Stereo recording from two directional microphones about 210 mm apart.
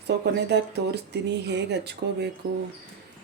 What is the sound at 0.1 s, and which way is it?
Speech, 55° right (ahead or behind).